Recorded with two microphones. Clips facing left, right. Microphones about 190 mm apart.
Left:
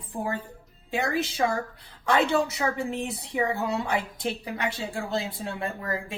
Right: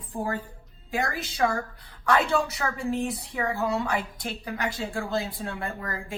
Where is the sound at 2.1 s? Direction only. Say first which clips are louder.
Left 1 dB; 25° left (ahead or behind).